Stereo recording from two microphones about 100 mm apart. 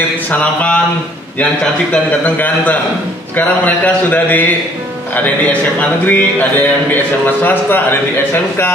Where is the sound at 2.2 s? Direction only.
15° left (ahead or behind).